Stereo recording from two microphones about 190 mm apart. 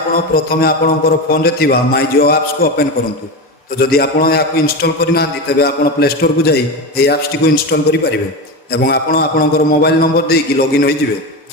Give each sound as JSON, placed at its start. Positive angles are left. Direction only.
{"t": 0.1, "sound": "a man's voice", "side_deg": 50}